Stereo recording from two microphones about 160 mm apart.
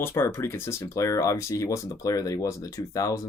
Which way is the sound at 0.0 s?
15° left (ahead or behind).